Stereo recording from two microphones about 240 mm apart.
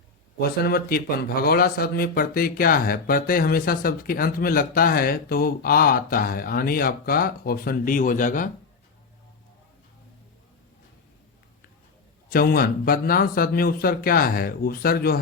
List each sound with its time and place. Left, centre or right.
0.6 s speech: left
12.3 s speech: left